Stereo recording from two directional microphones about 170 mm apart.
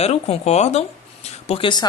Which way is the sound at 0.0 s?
40° left (ahead or behind).